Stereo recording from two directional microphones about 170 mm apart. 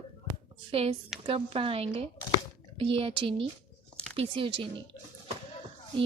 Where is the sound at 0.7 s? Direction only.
35° right (ahead or behind).